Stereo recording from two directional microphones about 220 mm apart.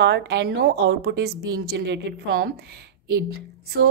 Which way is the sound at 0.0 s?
50° right (ahead or behind).